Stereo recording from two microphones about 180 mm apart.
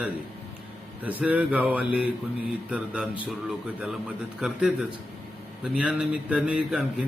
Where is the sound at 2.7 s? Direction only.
5° right (ahead or behind).